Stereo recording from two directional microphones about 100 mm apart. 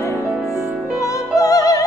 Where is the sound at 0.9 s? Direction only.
35° left (ahead or behind).